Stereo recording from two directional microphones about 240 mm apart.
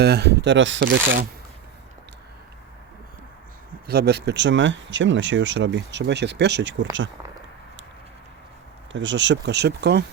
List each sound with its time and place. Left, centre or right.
0.0 s speech: right
3.8 s speech: right
8.9 s speech: right